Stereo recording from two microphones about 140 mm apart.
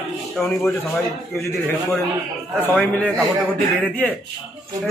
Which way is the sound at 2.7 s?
10° left (ahead or behind).